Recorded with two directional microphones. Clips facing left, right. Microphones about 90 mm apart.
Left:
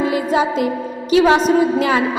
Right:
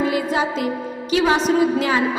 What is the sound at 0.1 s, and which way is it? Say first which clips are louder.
Music: left 4 dB; 40° left (ahead or behind).